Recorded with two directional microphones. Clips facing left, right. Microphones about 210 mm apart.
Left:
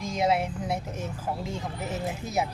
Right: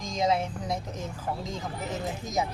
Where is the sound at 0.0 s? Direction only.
10° left (ahead or behind).